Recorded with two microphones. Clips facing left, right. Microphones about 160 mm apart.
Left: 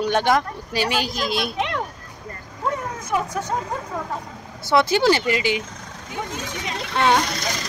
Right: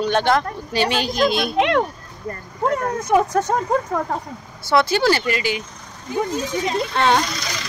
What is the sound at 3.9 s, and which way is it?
Speech, 60° right (ahead or behind).